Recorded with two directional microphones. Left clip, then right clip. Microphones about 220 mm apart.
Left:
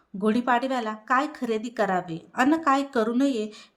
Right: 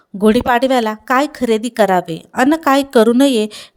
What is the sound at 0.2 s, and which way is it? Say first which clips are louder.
A woman's voice: right 11 dB; 35° right (ahead or behind).